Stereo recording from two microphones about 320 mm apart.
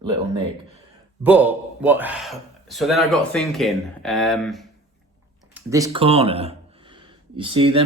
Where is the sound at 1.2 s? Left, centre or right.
Centre.